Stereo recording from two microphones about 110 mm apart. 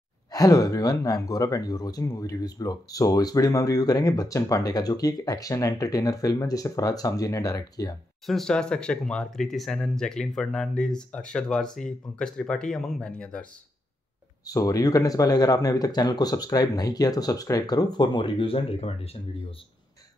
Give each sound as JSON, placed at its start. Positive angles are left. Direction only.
{"t": 0.3, "sound": "speech", "side_deg": 35}
{"t": 8.3, "sound": "speech", "side_deg": 5}
{"t": 14.4, "sound": "speech", "side_deg": 35}